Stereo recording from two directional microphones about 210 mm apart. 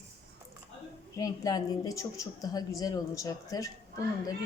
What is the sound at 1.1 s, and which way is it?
A woman's voice, 15° left (ahead or behind).